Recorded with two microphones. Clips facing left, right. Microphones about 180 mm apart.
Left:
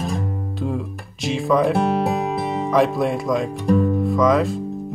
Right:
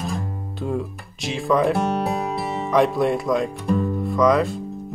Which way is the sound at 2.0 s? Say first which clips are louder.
Left 3 dB; 20° left (ahead or behind).